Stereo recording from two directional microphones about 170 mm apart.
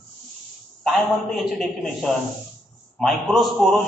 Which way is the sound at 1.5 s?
Centre (ahead or behind).